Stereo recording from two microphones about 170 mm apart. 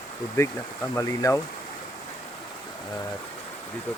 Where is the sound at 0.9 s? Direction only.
20° left (ahead or behind).